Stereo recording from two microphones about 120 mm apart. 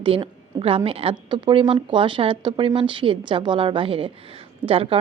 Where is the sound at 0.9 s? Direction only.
50° right (ahead or behind).